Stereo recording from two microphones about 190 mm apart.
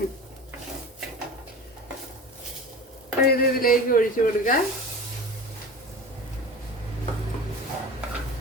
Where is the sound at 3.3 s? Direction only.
50° left (ahead or behind).